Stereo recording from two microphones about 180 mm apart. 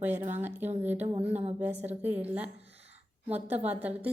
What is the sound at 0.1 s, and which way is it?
Speech, 40° right (ahead or behind).